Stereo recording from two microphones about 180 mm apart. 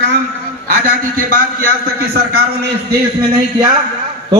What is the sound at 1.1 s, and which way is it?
A man's voice, 50° right (ahead or behind).